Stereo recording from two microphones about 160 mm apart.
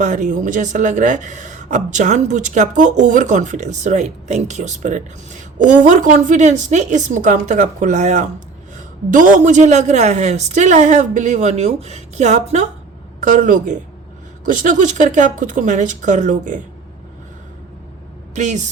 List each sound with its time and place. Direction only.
0.0 s speech: 55° right (ahead or behind)
18.3 s speech: 50° right (ahead or behind)